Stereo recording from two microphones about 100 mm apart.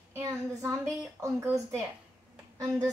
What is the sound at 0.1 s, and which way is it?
A woman's voice, 30° right (ahead or behind).